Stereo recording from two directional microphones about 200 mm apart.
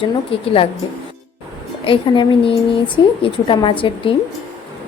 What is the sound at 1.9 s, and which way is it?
A woman's voice, 25° left (ahead or behind).